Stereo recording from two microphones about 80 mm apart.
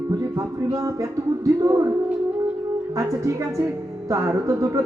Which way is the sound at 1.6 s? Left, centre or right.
Right.